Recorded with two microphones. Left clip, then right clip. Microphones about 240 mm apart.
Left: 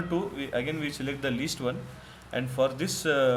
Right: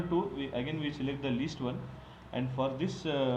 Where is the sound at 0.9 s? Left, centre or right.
Left.